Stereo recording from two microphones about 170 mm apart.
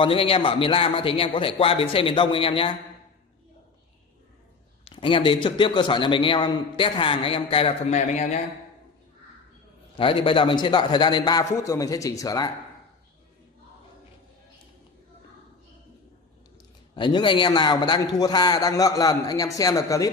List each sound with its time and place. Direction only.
0.0 s a man's voice: 30° left (ahead or behind)
4.8 s a man's voice: 30° left (ahead or behind)
9.9 s a man's voice: 30° left (ahead or behind)
16.9 s a man's voice: 30° left (ahead or behind)